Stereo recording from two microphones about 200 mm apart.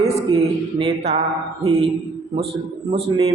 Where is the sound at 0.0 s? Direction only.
30° right (ahead or behind).